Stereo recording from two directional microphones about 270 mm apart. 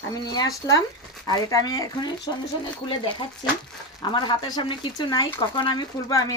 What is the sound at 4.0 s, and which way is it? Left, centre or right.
Speech, centre.